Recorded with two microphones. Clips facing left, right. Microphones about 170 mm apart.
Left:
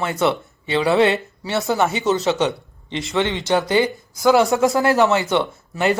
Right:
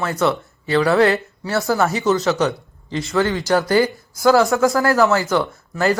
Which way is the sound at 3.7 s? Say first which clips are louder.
Right 2 dB; 20° left (ahead or behind).